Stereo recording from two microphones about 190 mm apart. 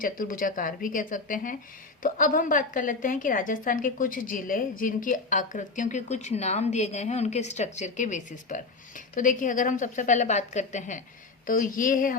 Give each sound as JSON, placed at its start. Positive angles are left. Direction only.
{"t": 0.0, "sound": "a woman's voice", "side_deg": 45}